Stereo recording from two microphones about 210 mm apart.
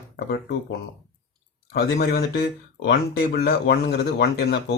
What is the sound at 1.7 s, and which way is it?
Speech, 50° left (ahead or behind).